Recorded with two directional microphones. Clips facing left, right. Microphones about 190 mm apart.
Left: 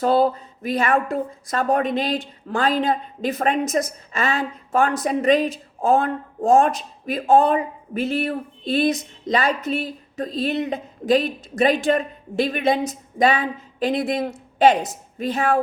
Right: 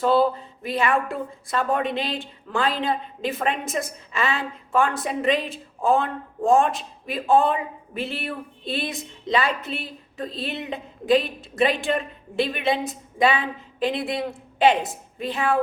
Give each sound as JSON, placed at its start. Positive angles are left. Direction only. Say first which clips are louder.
{"t": 0.0, "sound": "speech", "louder": "left 1 dB", "side_deg": 45}